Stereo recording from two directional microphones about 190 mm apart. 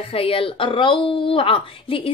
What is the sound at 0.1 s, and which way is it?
A woman's voice, 30° left (ahead or behind).